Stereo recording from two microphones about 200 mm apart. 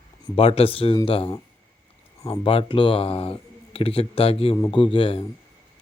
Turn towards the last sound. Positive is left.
turn(degrees=25)  # may be behind; listen again after turning